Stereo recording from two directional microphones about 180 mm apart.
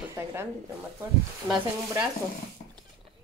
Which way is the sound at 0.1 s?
15° right (ahead or behind).